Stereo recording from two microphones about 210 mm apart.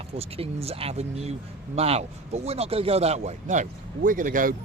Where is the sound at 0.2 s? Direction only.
30° right (ahead or behind).